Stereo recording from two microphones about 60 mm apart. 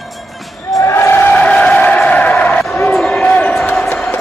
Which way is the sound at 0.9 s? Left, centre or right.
Left.